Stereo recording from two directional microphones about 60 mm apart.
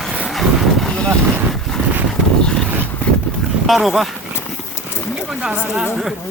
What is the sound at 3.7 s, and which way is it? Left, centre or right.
Speech, centre.